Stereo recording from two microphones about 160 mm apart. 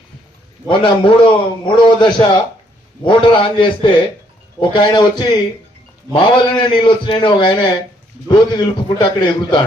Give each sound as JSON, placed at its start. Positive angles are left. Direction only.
{"t": 0.7, "sound": "a man's voice", "side_deg": 30}